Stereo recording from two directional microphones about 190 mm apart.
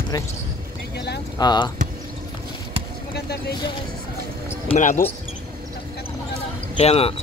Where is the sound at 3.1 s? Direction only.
55° left (ahead or behind).